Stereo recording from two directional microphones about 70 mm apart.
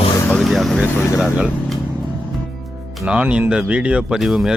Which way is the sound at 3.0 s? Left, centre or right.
Centre.